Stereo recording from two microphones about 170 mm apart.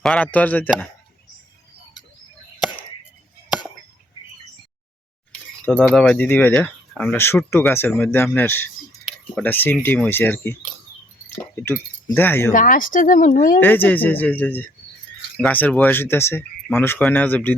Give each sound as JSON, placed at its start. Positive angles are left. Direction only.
{"t": 0.0, "sound": "speech", "side_deg": 5}
{"t": 5.6, "sound": "speech", "side_deg": 5}
{"t": 12.5, "sound": "speech", "side_deg": 55}
{"t": 13.6, "sound": "speech", "side_deg": 10}